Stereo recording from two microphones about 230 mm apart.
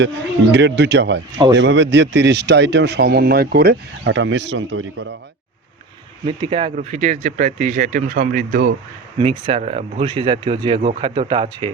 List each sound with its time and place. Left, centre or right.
0.5 s speech: right
6.2 s speech: right
9.1 s speech: right